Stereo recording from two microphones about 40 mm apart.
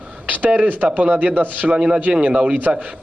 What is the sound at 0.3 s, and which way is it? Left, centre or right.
Speech, right.